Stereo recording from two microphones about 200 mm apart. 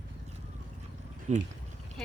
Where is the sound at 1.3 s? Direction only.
35° right (ahead or behind).